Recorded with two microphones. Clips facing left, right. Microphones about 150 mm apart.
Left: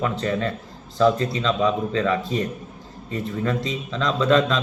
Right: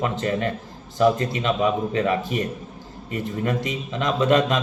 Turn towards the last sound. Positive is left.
turn(degrees=-20)  # may be behind; listen again after turning